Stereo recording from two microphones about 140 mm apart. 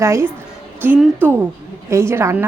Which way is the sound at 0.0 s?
20° right (ahead or behind).